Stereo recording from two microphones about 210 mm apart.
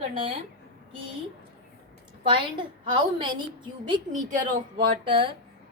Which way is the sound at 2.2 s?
25° right (ahead or behind).